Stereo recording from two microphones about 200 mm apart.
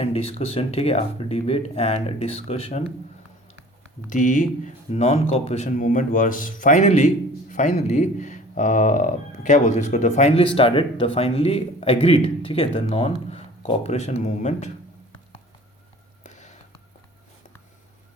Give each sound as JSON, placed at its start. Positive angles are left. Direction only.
{"t": 0.0, "sound": "speech", "side_deg": 30}
{"t": 4.1, "sound": "speech", "side_deg": 40}
{"t": 16.2, "sound": "a sound", "side_deg": 35}